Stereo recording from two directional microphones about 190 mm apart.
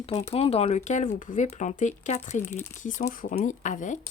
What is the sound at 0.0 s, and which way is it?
Speech, 30° left (ahead or behind).